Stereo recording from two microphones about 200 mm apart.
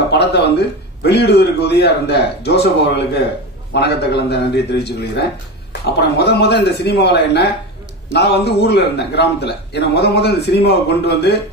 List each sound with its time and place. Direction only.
0.1 s a man's voice: 55° left (ahead or behind)